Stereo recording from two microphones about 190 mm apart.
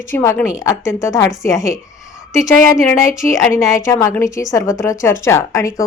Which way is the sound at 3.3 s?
15° left (ahead or behind).